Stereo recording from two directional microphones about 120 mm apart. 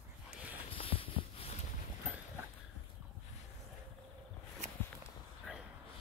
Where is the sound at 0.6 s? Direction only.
50° left (ahead or behind).